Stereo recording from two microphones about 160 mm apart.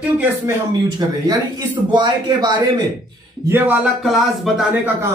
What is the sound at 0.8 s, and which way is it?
Speech, 25° right (ahead or behind).